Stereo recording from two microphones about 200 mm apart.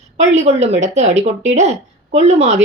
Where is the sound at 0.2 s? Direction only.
35° right (ahead or behind).